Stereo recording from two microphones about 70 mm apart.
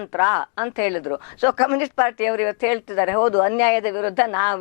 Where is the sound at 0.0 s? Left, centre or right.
Left.